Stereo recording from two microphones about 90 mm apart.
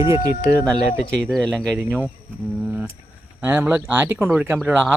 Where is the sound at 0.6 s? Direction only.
5° left (ahead or behind).